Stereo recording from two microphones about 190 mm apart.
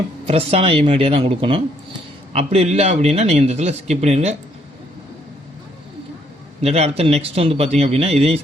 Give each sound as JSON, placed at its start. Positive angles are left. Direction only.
{"t": 0.3, "sound": "a man's voice", "side_deg": -30}
{"t": 6.6, "sound": "a man's voice", "side_deg": -35}